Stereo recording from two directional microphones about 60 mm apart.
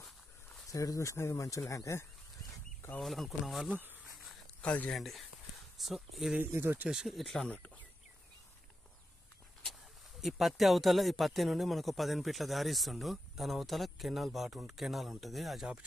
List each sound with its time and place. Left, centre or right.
0.7 s speech: left
1.1 s speech: left
1.4 s speech: left
3.0 s speech: centre
3.6 s insect: right
4.6 s speech: left
4.9 s speech: centre
6.4 s speech: right
6.9 s speech: centre
7.4 s speech: left
10.2 s speech: centre